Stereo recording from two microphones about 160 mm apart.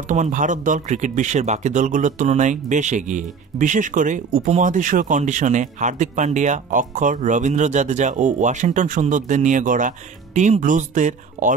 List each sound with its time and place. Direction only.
0.1 s speech: 50° right (ahead or behind)